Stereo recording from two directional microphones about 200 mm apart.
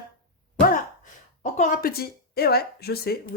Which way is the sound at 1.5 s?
45° left (ahead or behind).